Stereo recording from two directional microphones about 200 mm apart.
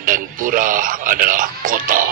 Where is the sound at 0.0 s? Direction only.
40° right (ahead or behind).